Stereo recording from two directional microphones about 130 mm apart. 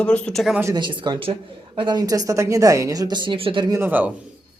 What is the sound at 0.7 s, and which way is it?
Speech, 40° right (ahead or behind).